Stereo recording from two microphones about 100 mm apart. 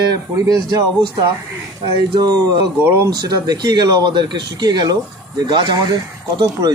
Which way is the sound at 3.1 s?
40° right (ahead or behind).